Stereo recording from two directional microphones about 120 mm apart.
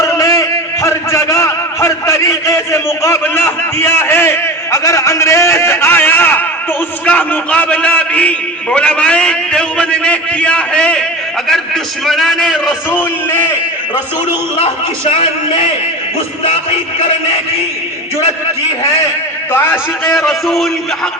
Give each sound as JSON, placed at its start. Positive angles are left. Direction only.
{"t": 0.0, "sound": "a sound", "side_deg": 25}
{"t": 7.0, "sound": "a man's voice", "side_deg": 10}
{"t": 14.6, "sound": "a man's voice", "side_deg": 50}
{"t": 19.5, "sound": "a man's voice", "side_deg": 20}
{"t": 20.1, "sound": "a man's voice", "side_deg": 0}